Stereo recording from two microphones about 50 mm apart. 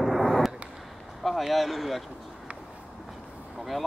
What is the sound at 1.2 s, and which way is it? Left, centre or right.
Speech, centre.